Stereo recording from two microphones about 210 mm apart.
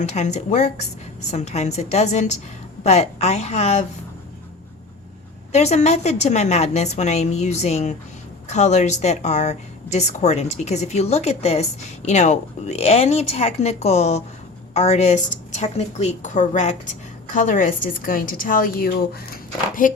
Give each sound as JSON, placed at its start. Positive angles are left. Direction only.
{"t": 0.0, "sound": "a woman's voice", "side_deg": 35}
{"t": 5.5, "sound": "a woman's voice", "side_deg": 30}